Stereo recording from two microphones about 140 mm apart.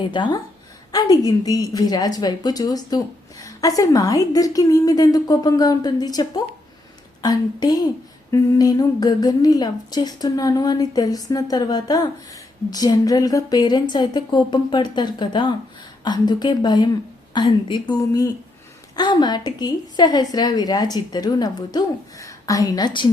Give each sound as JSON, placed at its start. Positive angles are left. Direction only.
{"t": 0.1, "sound": "a woman's voice", "side_deg": 35}